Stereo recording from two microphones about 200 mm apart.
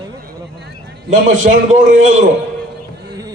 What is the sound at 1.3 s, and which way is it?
Speech, 40° right (ahead or behind).